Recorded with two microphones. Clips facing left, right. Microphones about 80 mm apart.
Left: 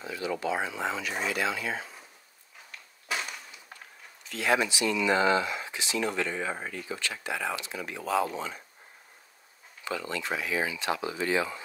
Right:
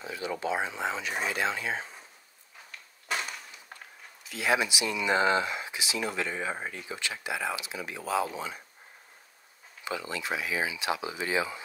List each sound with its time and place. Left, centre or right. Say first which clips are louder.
0.0 s speech: left 1 dB; right
3.1 s a sound: right 1 dB; centre
4.2 s speech: left 1 dB; centre; by 5.6 s right
5.6 s speech: left 2 dB; centre
9.8 s speech: left 1 dB; centre